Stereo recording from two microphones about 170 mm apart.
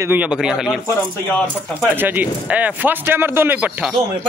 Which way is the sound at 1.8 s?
10° right (ahead or behind).